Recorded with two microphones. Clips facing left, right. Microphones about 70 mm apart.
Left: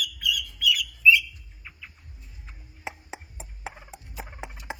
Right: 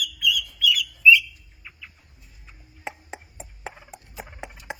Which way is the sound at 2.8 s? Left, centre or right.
Centre.